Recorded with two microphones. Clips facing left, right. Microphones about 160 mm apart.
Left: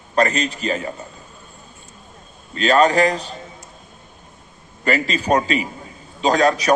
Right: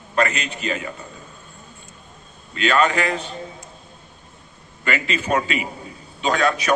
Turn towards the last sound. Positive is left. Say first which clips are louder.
# left 4 dB
turn(degrees=35)  # may be behind; listen again after turning